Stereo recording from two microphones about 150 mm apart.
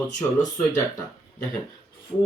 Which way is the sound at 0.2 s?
15° left (ahead or behind).